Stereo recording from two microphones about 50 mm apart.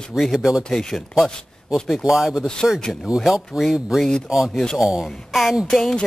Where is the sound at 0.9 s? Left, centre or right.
Centre.